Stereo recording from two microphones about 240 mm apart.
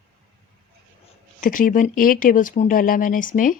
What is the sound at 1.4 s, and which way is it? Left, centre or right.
Speech, left.